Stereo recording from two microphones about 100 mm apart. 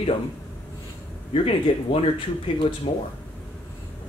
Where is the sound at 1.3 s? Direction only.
75° left (ahead or behind).